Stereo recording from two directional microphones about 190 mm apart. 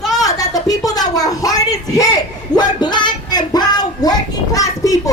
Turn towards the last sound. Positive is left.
turn(degrees=15)  # may be behind; listen again after turning